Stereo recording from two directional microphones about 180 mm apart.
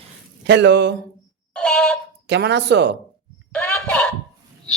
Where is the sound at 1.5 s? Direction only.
5° left (ahead or behind).